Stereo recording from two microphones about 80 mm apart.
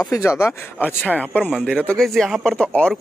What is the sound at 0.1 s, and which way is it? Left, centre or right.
Speech, left.